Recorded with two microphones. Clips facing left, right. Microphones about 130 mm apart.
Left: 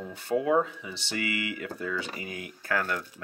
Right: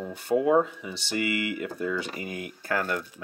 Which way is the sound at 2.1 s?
40° right (ahead or behind).